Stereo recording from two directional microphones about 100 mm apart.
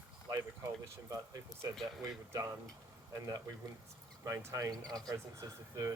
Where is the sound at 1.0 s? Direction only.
35° right (ahead or behind).